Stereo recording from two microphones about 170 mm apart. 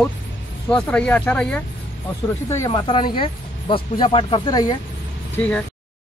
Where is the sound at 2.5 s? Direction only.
20° left (ahead or behind).